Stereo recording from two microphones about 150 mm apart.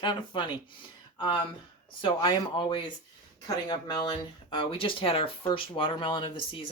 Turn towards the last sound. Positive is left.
turn(degrees=35)  # may be behind; listen again after turning